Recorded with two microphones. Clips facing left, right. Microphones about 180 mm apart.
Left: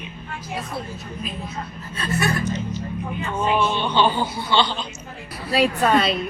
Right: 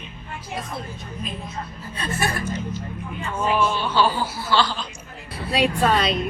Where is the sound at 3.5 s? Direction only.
25° left (ahead or behind).